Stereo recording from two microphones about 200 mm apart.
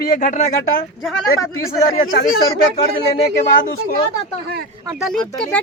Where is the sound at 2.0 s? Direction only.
45° left (ahead or behind).